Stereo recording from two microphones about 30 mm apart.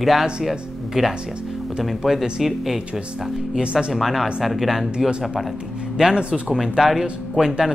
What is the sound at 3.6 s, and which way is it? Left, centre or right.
Speech, right.